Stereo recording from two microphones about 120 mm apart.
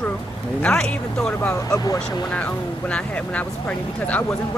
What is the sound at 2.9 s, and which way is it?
Speech, 10° left (ahead or behind).